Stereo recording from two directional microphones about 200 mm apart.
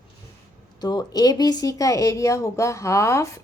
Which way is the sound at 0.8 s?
20° left (ahead or behind).